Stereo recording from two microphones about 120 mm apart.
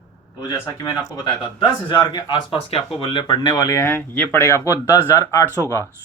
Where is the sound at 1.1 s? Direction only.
40° left (ahead or behind).